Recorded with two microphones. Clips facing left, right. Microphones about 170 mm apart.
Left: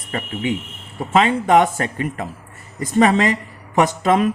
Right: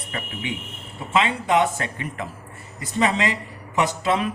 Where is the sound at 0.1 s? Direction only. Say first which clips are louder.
Left 8 dB; 40° left (ahead or behind).